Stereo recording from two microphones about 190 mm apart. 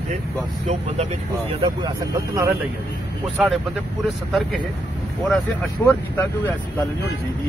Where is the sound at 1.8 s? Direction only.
15° right (ahead or behind).